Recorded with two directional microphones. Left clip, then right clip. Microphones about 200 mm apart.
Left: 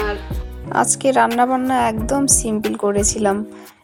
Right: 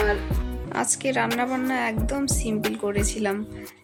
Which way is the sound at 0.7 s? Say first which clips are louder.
Left 9 dB; 25° left (ahead or behind).